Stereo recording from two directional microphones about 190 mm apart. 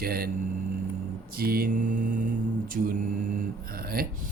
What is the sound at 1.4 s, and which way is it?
Speech, 50° right (ahead or behind).